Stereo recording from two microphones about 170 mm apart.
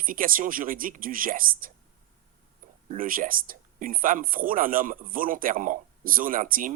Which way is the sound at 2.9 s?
55° right (ahead or behind).